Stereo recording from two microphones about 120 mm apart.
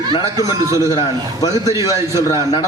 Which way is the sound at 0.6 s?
25° right (ahead or behind).